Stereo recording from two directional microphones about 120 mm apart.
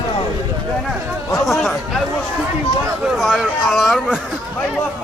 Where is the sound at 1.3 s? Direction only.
Centre (ahead or behind).